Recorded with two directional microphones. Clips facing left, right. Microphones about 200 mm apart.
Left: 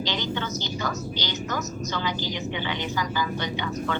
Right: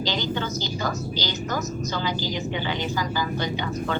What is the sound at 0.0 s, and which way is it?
Speech, 35° right (ahead or behind).